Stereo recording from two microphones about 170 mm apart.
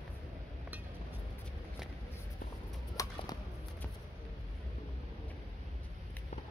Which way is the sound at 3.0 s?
20° left (ahead or behind).